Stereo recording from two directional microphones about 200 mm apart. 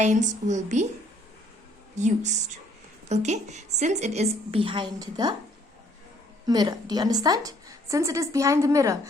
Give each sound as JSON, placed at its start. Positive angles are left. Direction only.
{"t": 0.0, "sound": "a woman's voice", "side_deg": -35}
{"t": 2.0, "sound": "a woman's voice", "side_deg": -35}
{"t": 6.5, "sound": "a woman's voice", "side_deg": -20}